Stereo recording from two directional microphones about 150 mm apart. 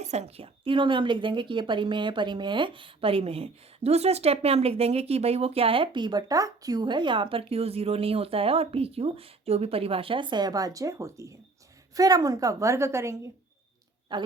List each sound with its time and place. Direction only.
0.0 s a woman's voice: 50° right (ahead or behind); by 13.1 s 20° right (ahead or behind)
14.1 s a woman's voice: 30° right (ahead or behind)